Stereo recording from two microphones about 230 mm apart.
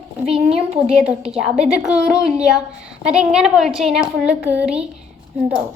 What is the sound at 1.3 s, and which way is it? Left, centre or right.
A woman's voice, centre.